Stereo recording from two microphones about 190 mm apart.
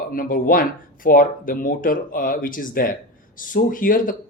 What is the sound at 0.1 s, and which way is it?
Speech, 50° left (ahead or behind).